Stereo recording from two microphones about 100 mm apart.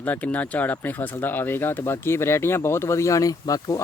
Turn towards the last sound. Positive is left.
turn(degrees=35)  # may be behind; listen again after turning